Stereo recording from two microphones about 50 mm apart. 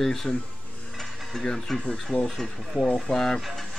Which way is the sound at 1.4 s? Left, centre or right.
Centre.